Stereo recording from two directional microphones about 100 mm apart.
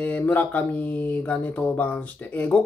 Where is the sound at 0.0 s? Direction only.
15° left (ahead or behind).